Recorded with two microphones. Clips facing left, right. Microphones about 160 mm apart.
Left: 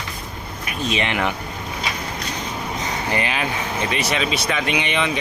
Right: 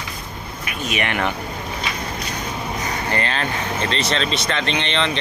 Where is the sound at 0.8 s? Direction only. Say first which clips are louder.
Even; 20° left (ahead or behind).